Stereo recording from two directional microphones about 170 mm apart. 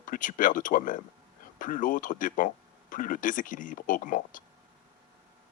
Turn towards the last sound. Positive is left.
turn(degrees=50)  # may be behind; listen again after turning